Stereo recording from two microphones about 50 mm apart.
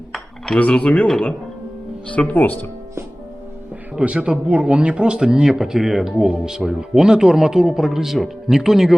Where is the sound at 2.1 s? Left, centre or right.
Left.